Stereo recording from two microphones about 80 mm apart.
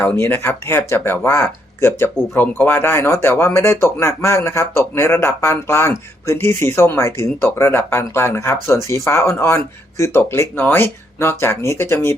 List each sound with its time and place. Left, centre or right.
0.0 s speech: left